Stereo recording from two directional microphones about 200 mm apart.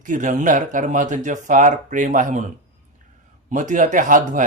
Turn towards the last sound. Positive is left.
turn(degrees=-40)  # may be behind; listen again after turning